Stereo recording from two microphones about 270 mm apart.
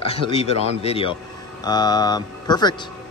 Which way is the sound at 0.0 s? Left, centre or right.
Left.